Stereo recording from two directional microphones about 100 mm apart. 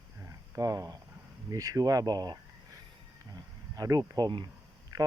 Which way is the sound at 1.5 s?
35° right (ahead or behind).